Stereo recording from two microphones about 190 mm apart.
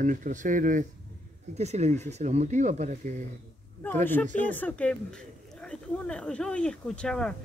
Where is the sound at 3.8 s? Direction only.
10° left (ahead or behind).